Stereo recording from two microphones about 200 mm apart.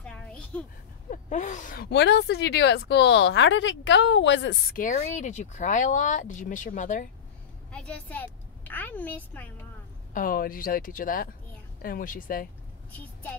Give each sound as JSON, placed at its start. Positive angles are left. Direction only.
{"t": 0.0, "sound": "a sound", "side_deg": 5}
{"t": 1.1, "sound": "speech", "side_deg": 40}
{"t": 1.9, "sound": "a woman's voice", "side_deg": 60}
{"t": 4.7, "sound": "speech", "side_deg": 40}
{"t": 7.7, "sound": "a woman's voice", "side_deg": 5}
{"t": 10.1, "sound": "speech", "side_deg": 45}
{"t": 12.9, "sound": "a woman's voice", "side_deg": 10}